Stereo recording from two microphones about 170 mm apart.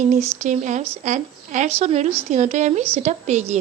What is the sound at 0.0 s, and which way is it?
Speech, 45° right (ahead or behind).